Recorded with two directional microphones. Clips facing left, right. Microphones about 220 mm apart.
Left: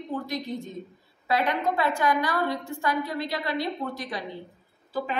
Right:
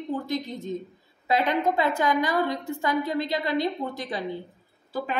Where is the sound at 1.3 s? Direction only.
20° right (ahead or behind).